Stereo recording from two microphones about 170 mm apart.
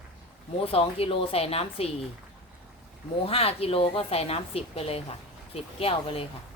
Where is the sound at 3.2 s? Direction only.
35° left (ahead or behind).